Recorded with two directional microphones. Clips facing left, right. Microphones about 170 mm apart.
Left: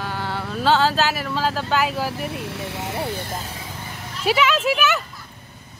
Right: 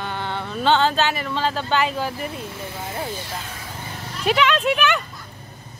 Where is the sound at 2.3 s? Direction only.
75° left (ahead or behind).